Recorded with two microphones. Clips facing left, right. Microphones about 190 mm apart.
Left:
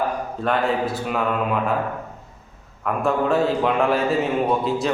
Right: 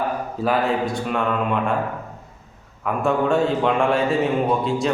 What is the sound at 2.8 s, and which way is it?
A man's voice, centre (ahead or behind).